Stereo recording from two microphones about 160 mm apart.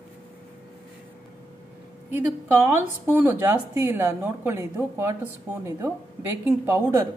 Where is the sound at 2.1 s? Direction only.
15° right (ahead or behind).